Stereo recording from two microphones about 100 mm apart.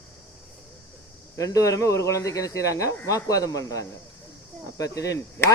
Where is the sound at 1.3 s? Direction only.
35° left (ahead or behind).